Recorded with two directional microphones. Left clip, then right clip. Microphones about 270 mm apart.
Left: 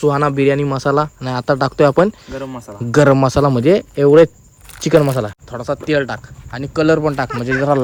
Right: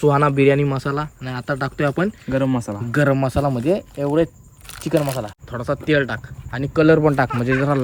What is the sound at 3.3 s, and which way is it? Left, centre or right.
Speech, right.